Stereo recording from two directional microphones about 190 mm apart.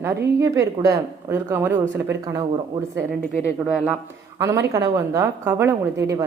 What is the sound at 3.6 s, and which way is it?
Speech, 5° right (ahead or behind).